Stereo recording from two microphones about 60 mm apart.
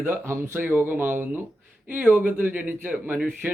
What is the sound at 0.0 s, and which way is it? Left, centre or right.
Speech, right.